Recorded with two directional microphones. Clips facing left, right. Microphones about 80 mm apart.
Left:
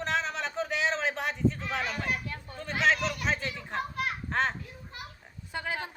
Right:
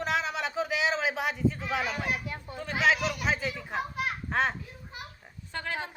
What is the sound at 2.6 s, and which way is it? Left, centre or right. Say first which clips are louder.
A child's voice: right 1 dB; centre.